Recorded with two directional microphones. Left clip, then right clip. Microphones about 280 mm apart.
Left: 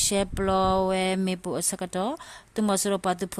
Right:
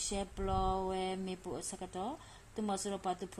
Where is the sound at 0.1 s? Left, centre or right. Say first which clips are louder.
Left 13 dB; left.